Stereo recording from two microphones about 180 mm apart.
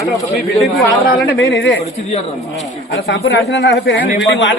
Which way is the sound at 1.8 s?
35° left (ahead or behind).